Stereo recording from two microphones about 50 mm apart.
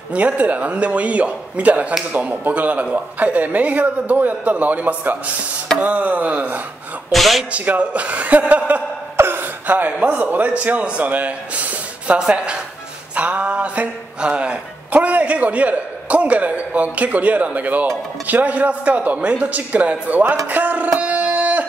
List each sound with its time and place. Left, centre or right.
0.1 s speech: right
7.1 s speech: centre
7.5 s speech: right
9.1 s a sound: right
9.7 s speech: right
12.2 s a woman's voice: centre
13.1 s speech: right
20.4 s a sound: right